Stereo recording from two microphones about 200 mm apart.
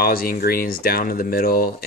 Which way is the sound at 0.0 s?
45° left (ahead or behind).